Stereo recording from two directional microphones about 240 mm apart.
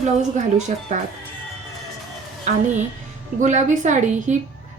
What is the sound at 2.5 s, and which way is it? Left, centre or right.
A woman's voice, right.